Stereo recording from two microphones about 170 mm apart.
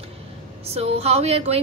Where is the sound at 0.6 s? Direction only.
35° right (ahead or behind).